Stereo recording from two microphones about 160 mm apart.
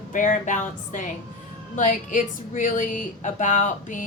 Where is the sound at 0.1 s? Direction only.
55° left (ahead or behind).